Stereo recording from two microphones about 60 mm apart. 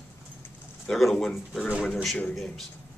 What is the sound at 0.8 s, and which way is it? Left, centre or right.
Speech, centre.